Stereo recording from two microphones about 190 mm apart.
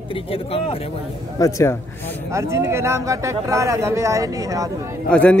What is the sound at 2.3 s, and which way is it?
Speech, 15° right (ahead or behind).